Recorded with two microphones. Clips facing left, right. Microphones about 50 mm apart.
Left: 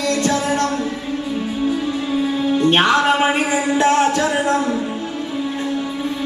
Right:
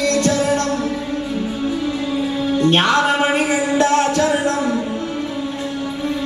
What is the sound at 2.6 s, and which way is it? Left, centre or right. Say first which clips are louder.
Music: even; left.